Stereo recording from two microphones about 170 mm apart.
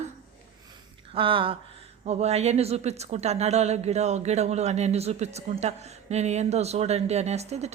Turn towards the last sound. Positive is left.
turn(degrees=-40)  # may be behind; listen again after turning